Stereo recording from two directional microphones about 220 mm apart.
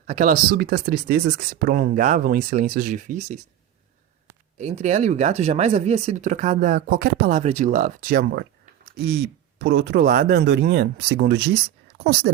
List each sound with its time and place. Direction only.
0.1 s speech: 35° right (ahead or behind)
4.5 s speech: 30° right (ahead or behind); by 12.3 s 45° right (ahead or behind)